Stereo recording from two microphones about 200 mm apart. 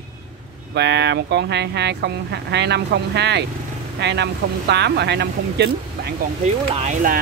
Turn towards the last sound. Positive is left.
turn(degrees=-40)  # may be behind; listen again after turning